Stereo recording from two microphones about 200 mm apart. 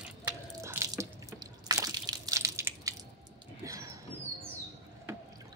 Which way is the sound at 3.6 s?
15° right (ahead or behind).